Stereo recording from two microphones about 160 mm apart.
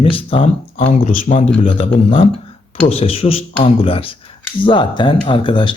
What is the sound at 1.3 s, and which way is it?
Speech, 35° left (ahead or behind).